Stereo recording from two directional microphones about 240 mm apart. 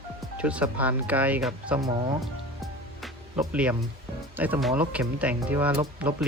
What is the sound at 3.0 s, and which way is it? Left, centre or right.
Music, centre.